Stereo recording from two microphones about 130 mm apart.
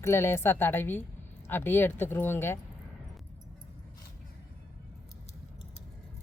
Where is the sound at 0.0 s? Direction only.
20° left (ahead or behind).